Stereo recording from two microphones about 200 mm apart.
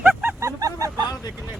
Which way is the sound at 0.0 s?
10° right (ahead or behind).